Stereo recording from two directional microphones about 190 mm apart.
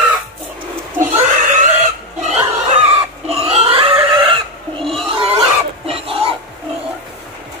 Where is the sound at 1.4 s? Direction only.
40° right (ahead or behind).